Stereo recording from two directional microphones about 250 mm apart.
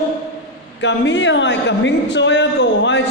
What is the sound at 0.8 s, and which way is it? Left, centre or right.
A man's voice, left.